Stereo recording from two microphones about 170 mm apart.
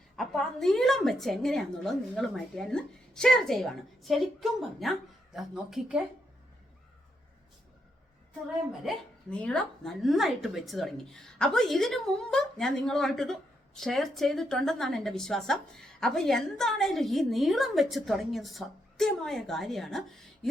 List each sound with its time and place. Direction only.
0.2 s a woman's voice: centre (ahead or behind)
8.8 s a woman's voice: 5° left (ahead or behind)